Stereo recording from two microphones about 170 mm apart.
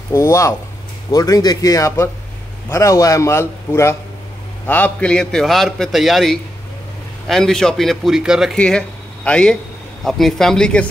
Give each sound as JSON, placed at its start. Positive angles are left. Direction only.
{"t": 0.1, "sound": "a man's voice", "side_deg": 15}